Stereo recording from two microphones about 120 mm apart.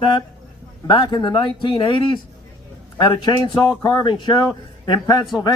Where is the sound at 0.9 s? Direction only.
40° left (ahead or behind).